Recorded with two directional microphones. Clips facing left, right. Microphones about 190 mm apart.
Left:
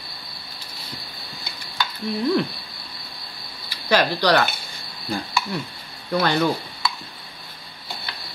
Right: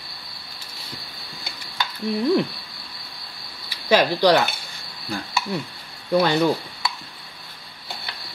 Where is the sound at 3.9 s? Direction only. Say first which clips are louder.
Right 2 dB; 20° right (ahead or behind).